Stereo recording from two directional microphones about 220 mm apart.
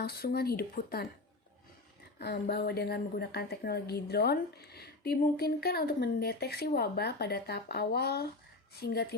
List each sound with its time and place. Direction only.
0.0 s a woman's voice: 45° left (ahead or behind)
2.1 s a woman's voice: 50° left (ahead or behind)